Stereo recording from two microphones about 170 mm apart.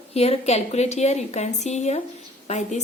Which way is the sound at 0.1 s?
40° left (ahead or behind).